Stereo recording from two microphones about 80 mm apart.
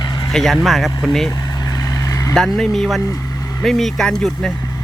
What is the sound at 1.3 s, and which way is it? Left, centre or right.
Vehicle, left.